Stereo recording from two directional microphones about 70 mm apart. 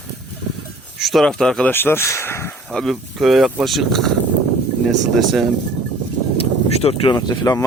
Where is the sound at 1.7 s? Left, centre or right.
Left.